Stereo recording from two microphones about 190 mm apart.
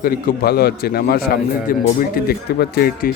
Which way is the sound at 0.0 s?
55° left (ahead or behind).